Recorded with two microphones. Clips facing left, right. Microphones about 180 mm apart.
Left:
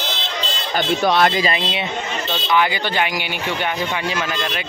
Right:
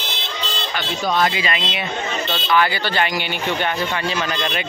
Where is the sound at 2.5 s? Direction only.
15° left (ahead or behind); by 4.6 s centre (ahead or behind).